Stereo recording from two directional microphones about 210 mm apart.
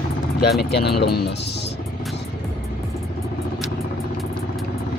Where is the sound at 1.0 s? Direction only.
50° left (ahead or behind).